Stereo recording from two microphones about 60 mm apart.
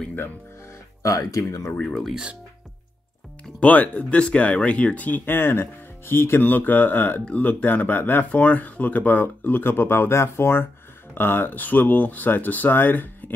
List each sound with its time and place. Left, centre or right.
1.0 s speech: left
1.8 s speech: centre
3.5 s speech: left